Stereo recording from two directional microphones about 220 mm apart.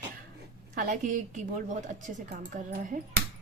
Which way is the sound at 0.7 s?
35° right (ahead or behind).